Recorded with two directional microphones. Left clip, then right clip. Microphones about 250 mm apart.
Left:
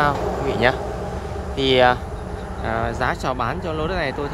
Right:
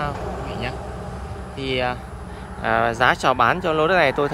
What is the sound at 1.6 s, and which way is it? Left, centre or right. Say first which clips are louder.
Speech: left 8 dB; centre.